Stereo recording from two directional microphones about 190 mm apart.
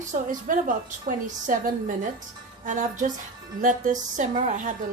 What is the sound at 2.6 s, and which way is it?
A woman's voice, 40° right (ahead or behind).